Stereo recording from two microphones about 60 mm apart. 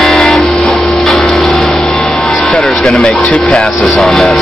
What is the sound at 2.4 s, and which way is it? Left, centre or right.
Music, left.